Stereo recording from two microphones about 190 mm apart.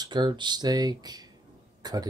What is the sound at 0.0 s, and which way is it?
Speech, 25° right (ahead or behind).